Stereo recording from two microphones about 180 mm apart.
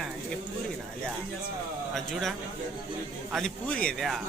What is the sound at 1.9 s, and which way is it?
A man's voice, centre (ahead or behind).